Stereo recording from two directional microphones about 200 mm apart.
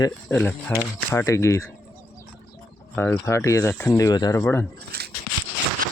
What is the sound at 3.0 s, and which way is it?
Speech, 10° left (ahead or behind).